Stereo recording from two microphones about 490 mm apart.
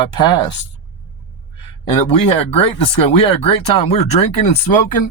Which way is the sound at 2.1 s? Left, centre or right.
Left.